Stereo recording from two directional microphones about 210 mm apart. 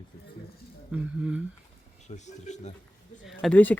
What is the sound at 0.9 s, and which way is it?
Speech, 5° right (ahead or behind).